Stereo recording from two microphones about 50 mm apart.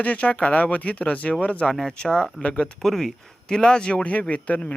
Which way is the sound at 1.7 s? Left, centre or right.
Centre.